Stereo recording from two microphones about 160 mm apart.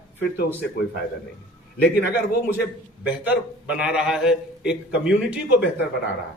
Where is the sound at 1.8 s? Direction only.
80° left.